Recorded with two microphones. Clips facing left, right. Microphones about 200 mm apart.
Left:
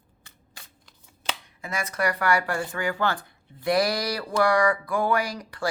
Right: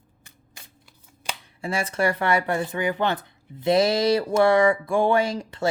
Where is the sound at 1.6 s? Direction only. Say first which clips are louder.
Right 5 dB; 30° right (ahead or behind).